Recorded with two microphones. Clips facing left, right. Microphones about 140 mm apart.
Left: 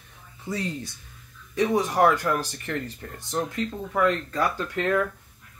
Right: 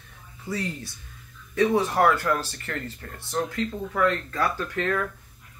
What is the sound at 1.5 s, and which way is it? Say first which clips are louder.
Speech: right 1 dB; 15° left (ahead or behind).